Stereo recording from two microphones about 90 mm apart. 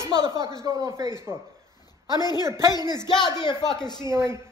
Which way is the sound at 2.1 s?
50° left (ahead or behind).